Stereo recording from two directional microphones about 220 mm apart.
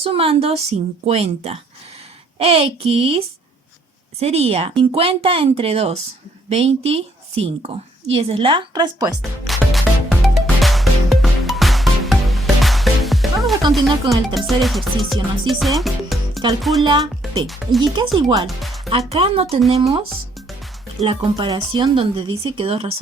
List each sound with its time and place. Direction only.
0.0 s speech: 25° right (ahead or behind)
9.2 s music: centre (ahead or behind)
14.0 s speech: 20° right (ahead or behind)
14.3 s music: centre (ahead or behind)
16.8 s speech: 20° right (ahead or behind)
17.4 s music: centre (ahead or behind)
17.9 s speech: 20° right (ahead or behind)
18.4 s speech: centre (ahead or behind)
18.9 s speech: 25° right (ahead or behind)
21.0 s speech: 25° right (ahead or behind)